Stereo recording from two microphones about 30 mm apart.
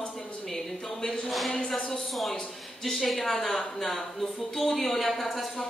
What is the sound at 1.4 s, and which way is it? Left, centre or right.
Speech, centre.